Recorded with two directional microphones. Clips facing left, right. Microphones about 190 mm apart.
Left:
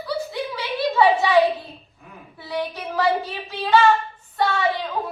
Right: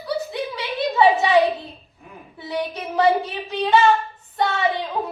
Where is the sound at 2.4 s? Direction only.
20° right (ahead or behind).